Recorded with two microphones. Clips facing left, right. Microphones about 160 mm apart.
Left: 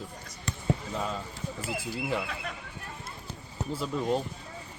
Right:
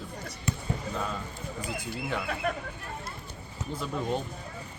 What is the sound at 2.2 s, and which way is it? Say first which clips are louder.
Speech: right 7 dB; 50° right (ahead or behind).